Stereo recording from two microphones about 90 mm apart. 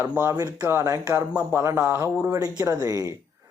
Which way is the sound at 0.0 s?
25° right (ahead or behind).